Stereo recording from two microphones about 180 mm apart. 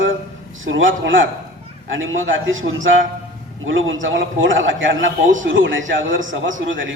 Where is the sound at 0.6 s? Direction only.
90° right.